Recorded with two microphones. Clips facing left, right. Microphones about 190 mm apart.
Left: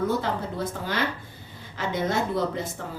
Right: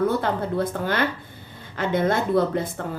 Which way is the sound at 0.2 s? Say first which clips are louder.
Right 5 dB; 55° right (ahead or behind).